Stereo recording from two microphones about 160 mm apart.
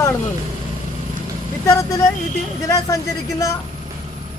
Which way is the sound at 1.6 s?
20° left (ahead or behind).